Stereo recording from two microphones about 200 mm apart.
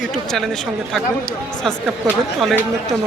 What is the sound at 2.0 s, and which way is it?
Speech, centre (ahead or behind).